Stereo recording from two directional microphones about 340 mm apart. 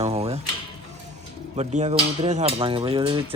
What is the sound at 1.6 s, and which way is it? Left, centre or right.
Speech, centre.